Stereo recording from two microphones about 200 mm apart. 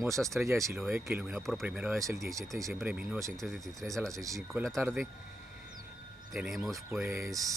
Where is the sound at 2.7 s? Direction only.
Centre (ahead or behind).